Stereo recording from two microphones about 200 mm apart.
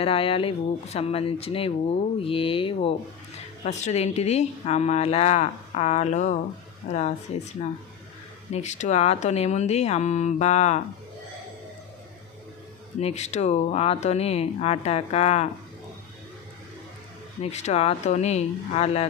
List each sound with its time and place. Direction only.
0.0 s a woman's voice: 30° left (ahead or behind)
13.0 s a woman's voice: 35° left (ahead or behind)
17.4 s a woman's voice: 35° left (ahead or behind)